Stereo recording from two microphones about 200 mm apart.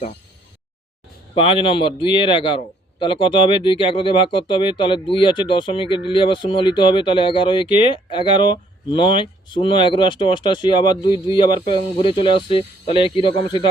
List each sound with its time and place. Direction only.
1.4 s speech: 25° left (ahead or behind)